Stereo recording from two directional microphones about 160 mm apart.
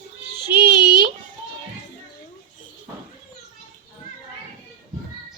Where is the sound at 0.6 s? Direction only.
75° right (ahead or behind).